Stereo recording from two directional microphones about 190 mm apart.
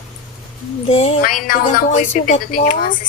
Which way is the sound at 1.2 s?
50° left (ahead or behind).